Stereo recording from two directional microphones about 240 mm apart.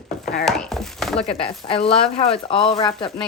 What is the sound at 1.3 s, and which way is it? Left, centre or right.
Speech, left.